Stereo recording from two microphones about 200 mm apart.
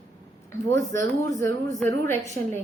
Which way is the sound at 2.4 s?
50° right (ahead or behind).